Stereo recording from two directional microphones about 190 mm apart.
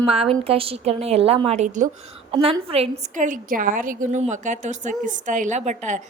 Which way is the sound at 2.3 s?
30° right (ahead or behind).